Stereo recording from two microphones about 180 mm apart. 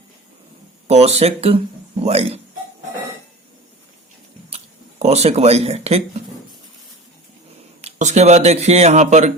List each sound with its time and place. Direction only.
0.9 s speech: 35° right (ahead or behind)
4.4 s a sound: 35° right (ahead or behind)
7.8 s speech: 40° right (ahead or behind)